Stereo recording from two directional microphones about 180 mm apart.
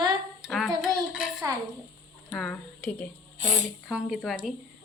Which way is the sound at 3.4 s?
40° right (ahead or behind).